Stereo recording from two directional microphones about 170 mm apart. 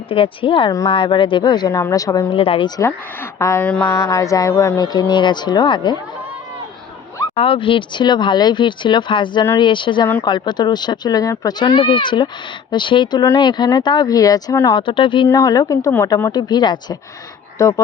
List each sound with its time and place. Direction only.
0.1 s a woman's voice: 30° left (ahead or behind)
2.3 s speech: 30° left (ahead or behind)
7.3 s speech: 30° left (ahead or behind); by 14.8 s 15° left (ahead or behind)
14.8 s speech: 30° left (ahead or behind)
15.3 s speech: 20° left (ahead or behind)